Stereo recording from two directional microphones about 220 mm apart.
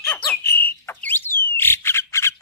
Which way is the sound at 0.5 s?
10° left (ahead or behind).